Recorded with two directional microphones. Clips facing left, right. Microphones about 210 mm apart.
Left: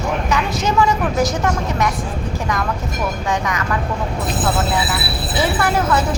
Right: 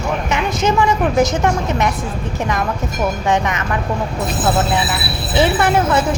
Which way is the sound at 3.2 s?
20° right (ahead or behind).